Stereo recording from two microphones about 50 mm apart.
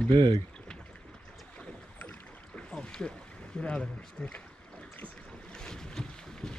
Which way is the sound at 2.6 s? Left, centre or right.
Centre.